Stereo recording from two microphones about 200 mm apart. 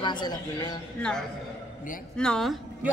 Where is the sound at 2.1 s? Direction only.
5° left (ahead or behind).